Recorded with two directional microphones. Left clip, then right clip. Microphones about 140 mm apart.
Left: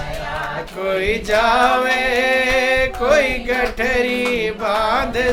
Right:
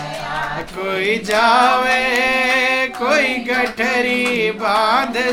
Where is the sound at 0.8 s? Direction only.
30° left (ahead or behind).